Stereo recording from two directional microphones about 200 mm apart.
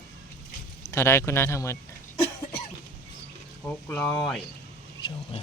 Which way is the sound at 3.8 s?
10° left (ahead or behind).